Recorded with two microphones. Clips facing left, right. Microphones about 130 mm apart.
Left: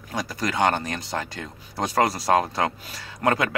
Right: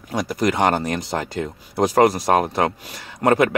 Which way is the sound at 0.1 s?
30° right (ahead or behind).